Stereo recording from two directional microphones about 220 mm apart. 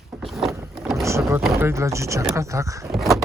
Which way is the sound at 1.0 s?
10° right (ahead or behind).